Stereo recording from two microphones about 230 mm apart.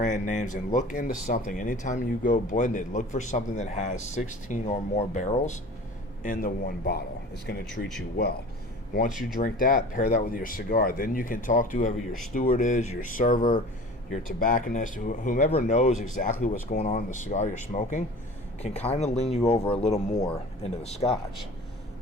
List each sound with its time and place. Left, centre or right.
0.0 s speech: left
9.4 s speech: left